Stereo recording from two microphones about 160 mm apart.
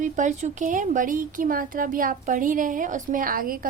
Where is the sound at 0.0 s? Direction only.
50° right (ahead or behind).